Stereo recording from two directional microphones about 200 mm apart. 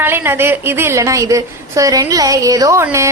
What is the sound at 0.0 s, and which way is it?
A woman's voice, 10° right (ahead or behind).